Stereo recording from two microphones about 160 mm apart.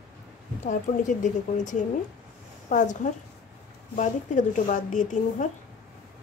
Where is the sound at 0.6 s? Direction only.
50° left (ahead or behind).